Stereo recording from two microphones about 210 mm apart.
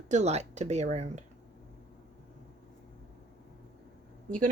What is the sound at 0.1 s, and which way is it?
Speech, 30° right (ahead or behind).